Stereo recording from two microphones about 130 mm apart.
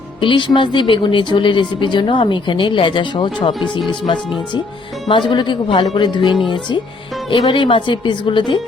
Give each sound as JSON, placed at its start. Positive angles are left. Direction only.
{"t": 0.2, "sound": "speech", "side_deg": 40}